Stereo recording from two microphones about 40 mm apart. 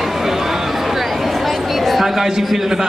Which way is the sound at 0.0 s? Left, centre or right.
Centre.